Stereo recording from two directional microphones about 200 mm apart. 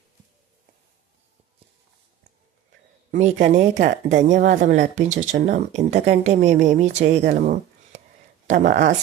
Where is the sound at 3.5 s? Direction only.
35° right (ahead or behind).